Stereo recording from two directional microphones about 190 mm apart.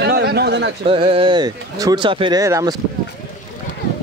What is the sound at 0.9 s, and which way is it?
Speech, 30° right (ahead or behind).